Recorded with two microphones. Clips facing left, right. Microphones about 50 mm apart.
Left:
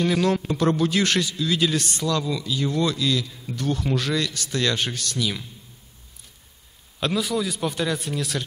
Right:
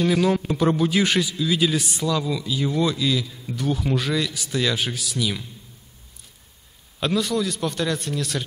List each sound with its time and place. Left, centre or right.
0.0 s a man's voice: centre
7.0 s a man's voice: centre